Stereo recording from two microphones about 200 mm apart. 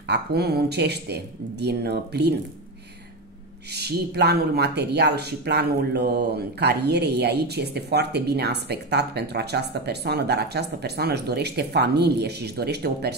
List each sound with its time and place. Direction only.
0.1 s speech: 55° right (ahead or behind)
3.7 s speech: 55° right (ahead or behind)